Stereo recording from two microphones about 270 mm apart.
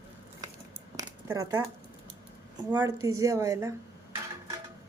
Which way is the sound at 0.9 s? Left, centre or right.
Centre.